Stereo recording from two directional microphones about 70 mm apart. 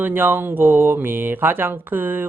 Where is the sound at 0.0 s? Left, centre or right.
Right.